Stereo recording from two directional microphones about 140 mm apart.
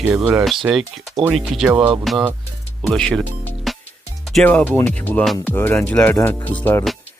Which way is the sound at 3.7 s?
Centre (ahead or behind).